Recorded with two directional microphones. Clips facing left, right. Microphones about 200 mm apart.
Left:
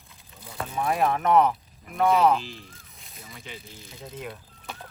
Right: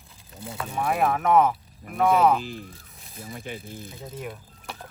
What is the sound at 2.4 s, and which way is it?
Speech, 55° right (ahead or behind).